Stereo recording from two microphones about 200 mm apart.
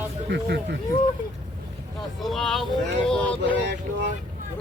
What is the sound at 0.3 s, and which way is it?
Speech, 55° right (ahead or behind).